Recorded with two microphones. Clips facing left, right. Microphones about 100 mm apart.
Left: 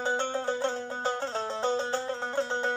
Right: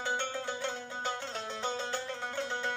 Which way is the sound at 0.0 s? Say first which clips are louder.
Left 6 dB; 30° left (ahead or behind).